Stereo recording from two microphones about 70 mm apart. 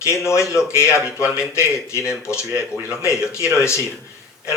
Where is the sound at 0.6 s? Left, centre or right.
Centre.